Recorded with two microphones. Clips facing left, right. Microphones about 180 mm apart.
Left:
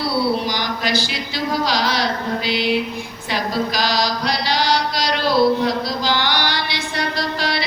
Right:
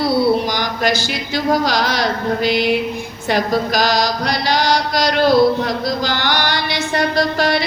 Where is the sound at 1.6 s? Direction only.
50° right (ahead or behind).